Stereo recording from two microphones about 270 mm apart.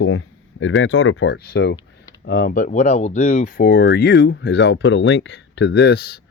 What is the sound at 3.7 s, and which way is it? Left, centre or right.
Speech, left.